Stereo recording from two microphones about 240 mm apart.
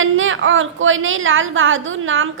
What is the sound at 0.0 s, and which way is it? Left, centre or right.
A woman's voice, right.